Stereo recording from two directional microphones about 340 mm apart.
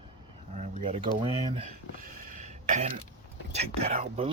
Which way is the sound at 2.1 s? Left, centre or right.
Right.